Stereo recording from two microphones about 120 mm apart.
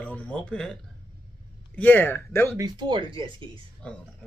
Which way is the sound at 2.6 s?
40° right (ahead or behind).